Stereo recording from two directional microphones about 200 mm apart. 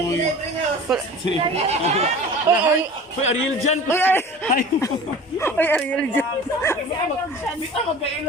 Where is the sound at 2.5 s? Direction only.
10° right (ahead or behind).